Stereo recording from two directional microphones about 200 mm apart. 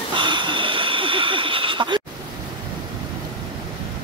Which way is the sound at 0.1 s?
25° right (ahead or behind).